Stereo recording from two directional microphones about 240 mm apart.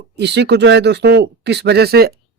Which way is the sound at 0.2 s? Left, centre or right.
Right.